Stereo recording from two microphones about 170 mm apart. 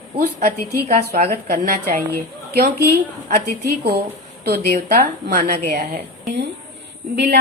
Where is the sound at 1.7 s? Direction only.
55° right (ahead or behind).